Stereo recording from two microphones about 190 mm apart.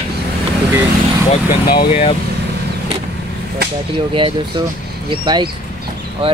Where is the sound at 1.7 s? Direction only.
30° left (ahead or behind).